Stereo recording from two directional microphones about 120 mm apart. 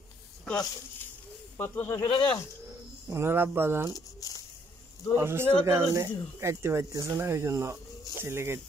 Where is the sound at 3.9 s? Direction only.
30° left (ahead or behind).